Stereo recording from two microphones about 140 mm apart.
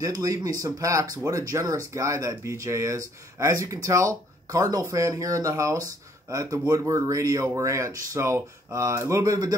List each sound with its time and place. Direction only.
0.2 s speech: 25° right (ahead or behind)